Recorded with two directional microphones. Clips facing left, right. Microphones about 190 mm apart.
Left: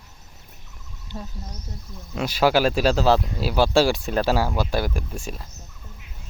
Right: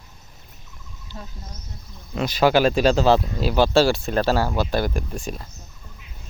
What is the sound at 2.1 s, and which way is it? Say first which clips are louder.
Speech: right 2 dB; 5° left (ahead or behind).